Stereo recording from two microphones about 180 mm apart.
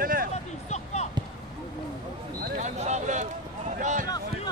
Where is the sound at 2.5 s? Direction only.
40° right (ahead or behind).